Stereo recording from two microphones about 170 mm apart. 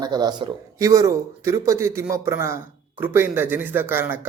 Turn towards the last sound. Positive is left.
turn(degrees=-15)  # may be behind; listen again after turning